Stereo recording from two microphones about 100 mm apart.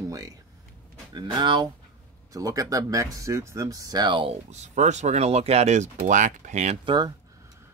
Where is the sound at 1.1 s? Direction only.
50° right (ahead or behind).